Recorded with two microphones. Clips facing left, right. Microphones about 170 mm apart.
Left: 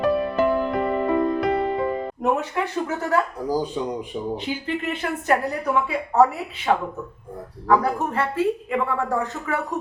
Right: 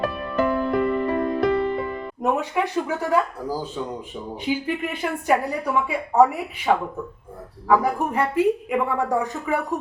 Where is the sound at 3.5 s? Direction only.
15° left (ahead or behind).